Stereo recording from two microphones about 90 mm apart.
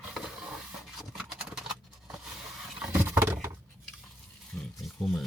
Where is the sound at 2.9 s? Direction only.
20° right (ahead or behind).